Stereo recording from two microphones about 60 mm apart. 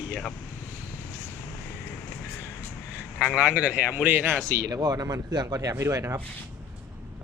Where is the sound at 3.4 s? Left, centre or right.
Centre; by 4.4 s right.